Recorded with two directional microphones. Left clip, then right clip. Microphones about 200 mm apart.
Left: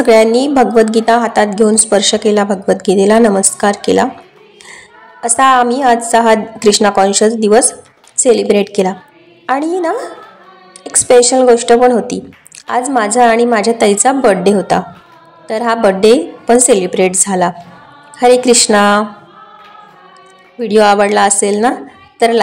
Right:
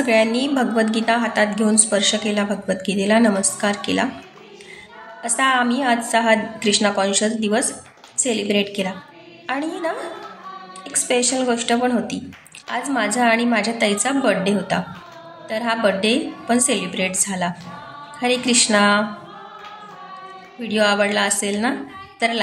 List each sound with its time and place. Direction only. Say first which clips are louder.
0.0 s a woman's voice: left 10 dB; 35° left (ahead or behind)
5.2 s a woman's voice: left 9 dB; 30° left (ahead or behind)
20.5 s a woman's voice: left 10 dB; 30° left (ahead or behind)